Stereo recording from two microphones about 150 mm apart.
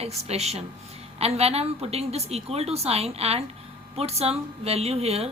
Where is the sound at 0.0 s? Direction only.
45° right (ahead or behind).